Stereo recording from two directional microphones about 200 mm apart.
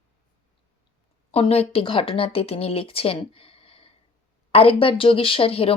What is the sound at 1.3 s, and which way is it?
Speech, 30° left (ahead or behind).